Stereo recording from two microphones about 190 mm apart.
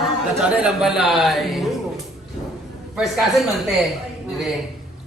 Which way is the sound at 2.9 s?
Centre (ahead or behind).